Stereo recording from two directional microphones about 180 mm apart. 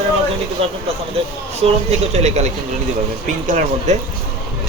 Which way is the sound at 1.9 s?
40° right (ahead or behind).